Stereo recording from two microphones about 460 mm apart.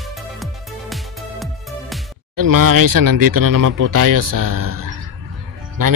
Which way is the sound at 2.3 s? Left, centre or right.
Right.